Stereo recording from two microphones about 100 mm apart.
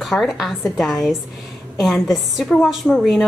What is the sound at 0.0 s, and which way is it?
A woman's voice, centre (ahead or behind).